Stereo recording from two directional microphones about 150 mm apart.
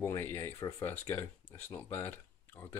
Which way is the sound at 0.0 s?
15° left (ahead or behind).